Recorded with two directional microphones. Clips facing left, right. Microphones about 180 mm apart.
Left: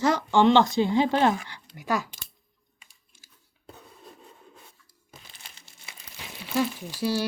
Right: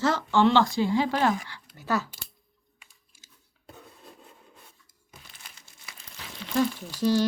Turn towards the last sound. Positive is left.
turn(degrees=10)  # may be behind; listen again after turning